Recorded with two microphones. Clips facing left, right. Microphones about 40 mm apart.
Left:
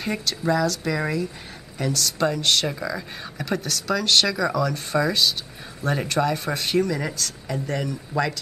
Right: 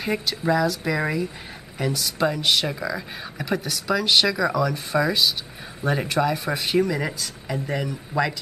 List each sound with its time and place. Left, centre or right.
0.0 s speech: centre